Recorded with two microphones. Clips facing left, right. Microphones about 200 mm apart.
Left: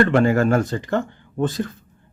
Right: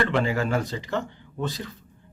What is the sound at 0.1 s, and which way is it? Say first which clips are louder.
Speech: left 7 dB; 50° left (ahead or behind).